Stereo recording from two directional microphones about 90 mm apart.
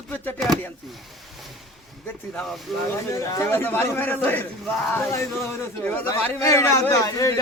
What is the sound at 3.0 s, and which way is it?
Speech, 35° left (ahead or behind).